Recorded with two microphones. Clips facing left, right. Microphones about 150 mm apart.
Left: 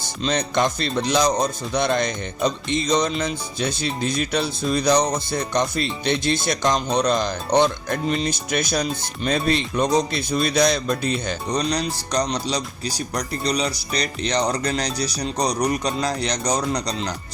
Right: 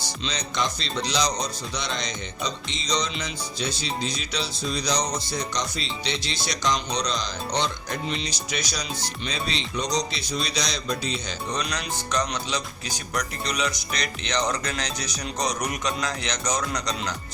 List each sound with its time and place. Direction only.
0.0 s music: 55° left (ahead or behind)
11.5 s speech: 35° left (ahead or behind)